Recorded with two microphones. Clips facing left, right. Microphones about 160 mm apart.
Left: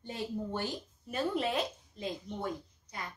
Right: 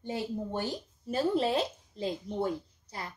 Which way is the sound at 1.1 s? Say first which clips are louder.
Right 5 dB; 30° right (ahead or behind).